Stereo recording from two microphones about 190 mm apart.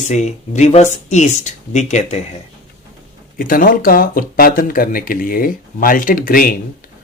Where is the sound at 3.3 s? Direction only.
45° left (ahead or behind).